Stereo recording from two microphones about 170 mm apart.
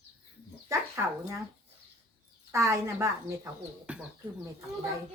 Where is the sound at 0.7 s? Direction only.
15° right (ahead or behind).